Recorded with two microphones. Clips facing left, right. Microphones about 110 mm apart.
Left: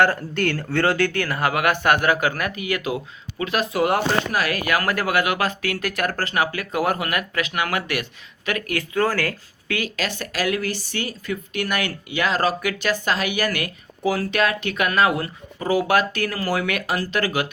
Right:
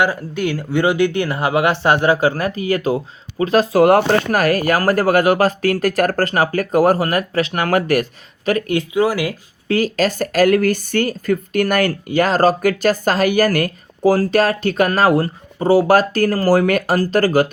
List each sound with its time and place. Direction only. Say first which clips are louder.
0.0 s speech: right 1 dB; 10° right (ahead or behind); by 8.0 s 40° right (ahead or behind)
8.4 s speech: right 8 dB; 30° right (ahead or behind)
8.9 s speech: right 3 dB; 10° right (ahead or behind)
9.6 s speech: right 9 dB; 35° right (ahead or behind)